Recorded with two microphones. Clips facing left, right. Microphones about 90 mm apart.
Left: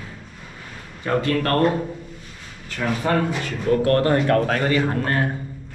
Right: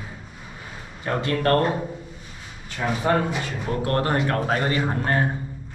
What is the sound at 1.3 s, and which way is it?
Speech, 10° right (ahead or behind).